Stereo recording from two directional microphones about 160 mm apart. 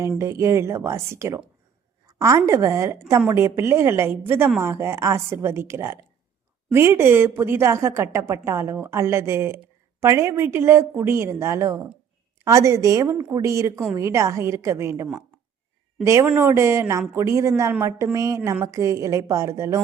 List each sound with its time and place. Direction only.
0.2 s a woman's voice: 15° right (ahead or behind)
16.0 s a woman's voice: 15° right (ahead or behind)